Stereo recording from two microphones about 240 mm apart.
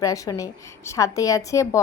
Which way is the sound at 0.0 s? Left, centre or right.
Centre.